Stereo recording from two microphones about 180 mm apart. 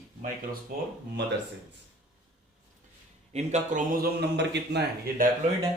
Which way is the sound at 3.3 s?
40° right (ahead or behind).